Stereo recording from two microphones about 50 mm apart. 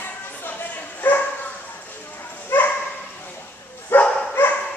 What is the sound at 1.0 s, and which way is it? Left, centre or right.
Dog, left.